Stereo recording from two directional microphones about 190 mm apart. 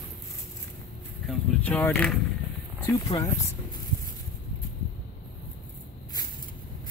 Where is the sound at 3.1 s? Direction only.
35° left (ahead or behind).